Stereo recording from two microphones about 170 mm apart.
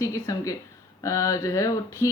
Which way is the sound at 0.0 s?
20° left (ahead or behind).